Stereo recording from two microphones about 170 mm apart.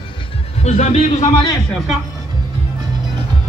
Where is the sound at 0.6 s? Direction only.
45° left (ahead or behind).